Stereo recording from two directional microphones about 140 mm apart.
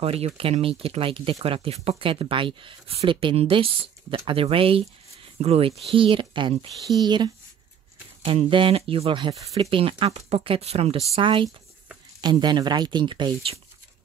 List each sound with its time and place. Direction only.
0.0 s speech: 45° right (ahead or behind)